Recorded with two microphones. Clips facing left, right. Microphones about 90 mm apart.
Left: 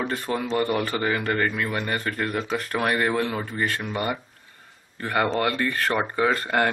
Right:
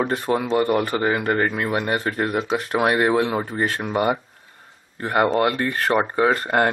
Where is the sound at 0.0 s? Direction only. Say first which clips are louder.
Right 5 dB; 20° right (ahead or behind).